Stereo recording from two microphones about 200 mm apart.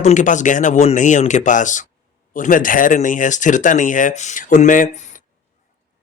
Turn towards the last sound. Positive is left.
turn(degrees=40)  # may be behind; listen again after turning